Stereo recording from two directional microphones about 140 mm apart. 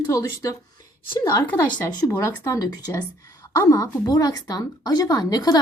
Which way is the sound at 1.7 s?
30° left (ahead or behind).